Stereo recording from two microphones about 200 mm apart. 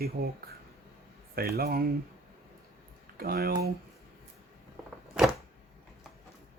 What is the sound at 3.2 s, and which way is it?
Speech, 50° right (ahead or behind).